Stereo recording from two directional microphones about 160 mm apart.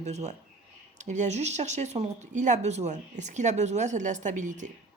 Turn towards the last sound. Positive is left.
turn(degrees=-50)  # may be behind; listen again after turning